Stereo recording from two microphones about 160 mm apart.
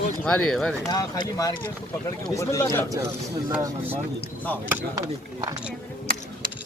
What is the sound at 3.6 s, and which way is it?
Speech, 15° right (ahead or behind).